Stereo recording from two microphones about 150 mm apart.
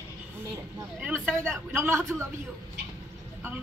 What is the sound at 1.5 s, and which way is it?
Speech, 15° right (ahead or behind).